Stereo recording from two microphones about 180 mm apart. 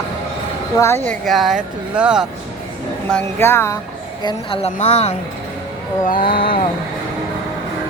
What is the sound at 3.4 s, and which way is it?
Speech, 15° left (ahead or behind).